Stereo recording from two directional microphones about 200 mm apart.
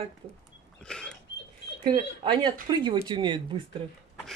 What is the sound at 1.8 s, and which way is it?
Speech, 25° right (ahead or behind).